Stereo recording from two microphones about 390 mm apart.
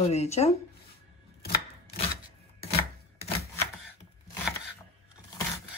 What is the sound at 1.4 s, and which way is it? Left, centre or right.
Chopping, left.